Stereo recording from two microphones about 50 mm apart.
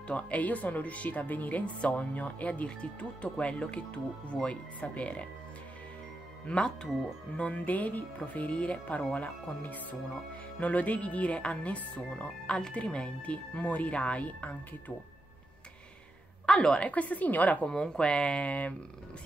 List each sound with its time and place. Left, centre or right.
0.1 s speech: left
6.4 s speech: centre
16.4 s a woman's voice: centre
16.8 s speech: left
17.6 s speech: centre